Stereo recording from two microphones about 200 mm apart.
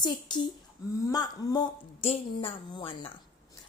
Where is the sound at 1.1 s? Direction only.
20° left (ahead or behind).